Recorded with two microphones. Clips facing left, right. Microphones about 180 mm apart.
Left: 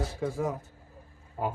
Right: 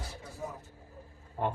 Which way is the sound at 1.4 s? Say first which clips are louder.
Even; 5° left (ahead or behind).